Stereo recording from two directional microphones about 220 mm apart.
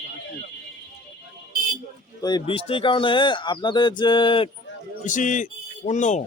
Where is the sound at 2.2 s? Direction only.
20° left (ahead or behind).